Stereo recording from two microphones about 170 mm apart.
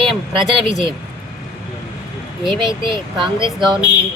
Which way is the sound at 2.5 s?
30° right (ahead or behind).